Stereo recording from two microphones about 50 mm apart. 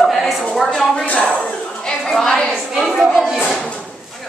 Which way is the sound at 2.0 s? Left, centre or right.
Centre.